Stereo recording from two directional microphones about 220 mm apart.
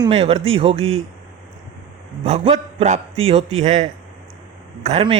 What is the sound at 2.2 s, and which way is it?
A man's voice, 30° right (ahead or behind).